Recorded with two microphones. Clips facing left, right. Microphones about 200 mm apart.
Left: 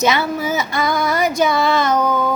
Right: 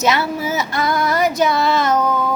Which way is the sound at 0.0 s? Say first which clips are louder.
Left 1 dB; 5° right (ahead or behind).